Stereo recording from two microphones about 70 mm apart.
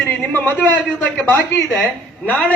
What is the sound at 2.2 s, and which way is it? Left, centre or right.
Speech, left.